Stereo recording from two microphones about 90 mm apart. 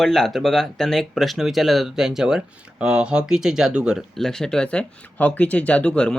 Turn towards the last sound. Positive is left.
turn(degrees=10)  # may be behind; listen again after turning